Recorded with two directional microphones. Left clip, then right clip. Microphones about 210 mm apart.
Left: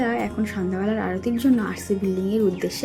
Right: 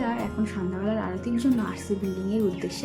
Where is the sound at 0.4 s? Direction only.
20° left (ahead or behind).